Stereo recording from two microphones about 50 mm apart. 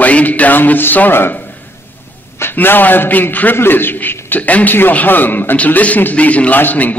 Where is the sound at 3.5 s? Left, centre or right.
Left.